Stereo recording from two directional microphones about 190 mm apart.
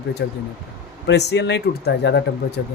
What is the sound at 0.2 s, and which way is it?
A man's voice, 65° left (ahead or behind).